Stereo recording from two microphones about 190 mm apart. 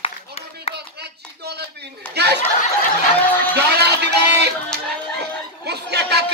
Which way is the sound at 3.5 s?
60° right (ahead or behind).